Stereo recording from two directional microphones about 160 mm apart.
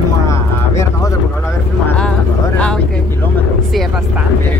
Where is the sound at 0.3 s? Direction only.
20° left (ahead or behind).